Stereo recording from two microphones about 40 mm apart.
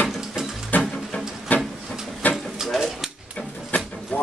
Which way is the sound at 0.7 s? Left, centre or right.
Left.